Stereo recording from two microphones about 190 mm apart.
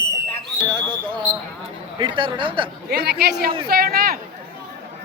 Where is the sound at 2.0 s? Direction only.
25° right (ahead or behind).